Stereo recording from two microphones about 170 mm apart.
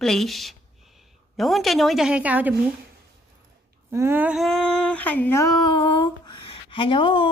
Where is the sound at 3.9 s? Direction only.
15° right (ahead or behind).